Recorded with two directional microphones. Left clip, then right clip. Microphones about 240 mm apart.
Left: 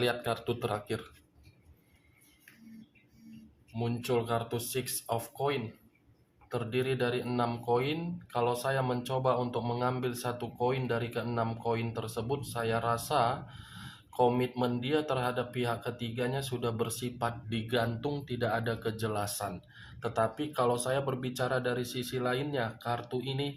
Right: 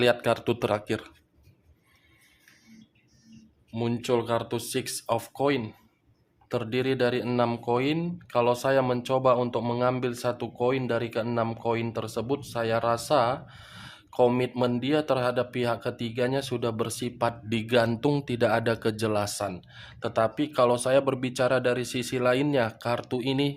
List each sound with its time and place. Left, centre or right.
0.0 s speech: right
3.8 s speech: right